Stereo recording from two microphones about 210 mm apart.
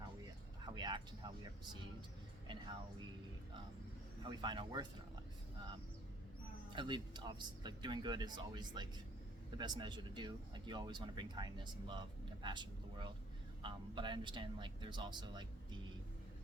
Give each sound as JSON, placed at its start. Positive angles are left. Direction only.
{"t": 0.6, "sound": "a sound", "side_deg": -20}
{"t": 4.2, "sound": "speech", "side_deg": -20}
{"t": 6.7, "sound": "speech", "side_deg": -20}